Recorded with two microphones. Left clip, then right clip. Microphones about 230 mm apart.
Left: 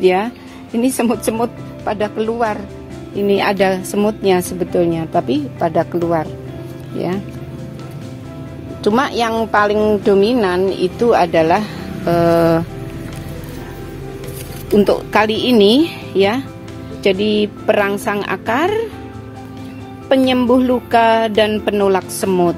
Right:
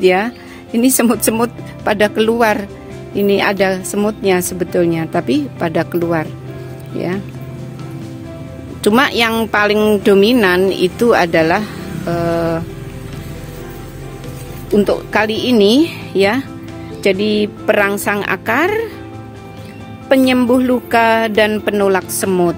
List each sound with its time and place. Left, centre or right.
0.0 s a woman's voice: centre; by 2.6 s right
3.2 s a woman's voice: centre
8.8 s speech: right
12.1 s music: centre
14.7 s a woman's voice: centre
20.1 s a woman's voice: centre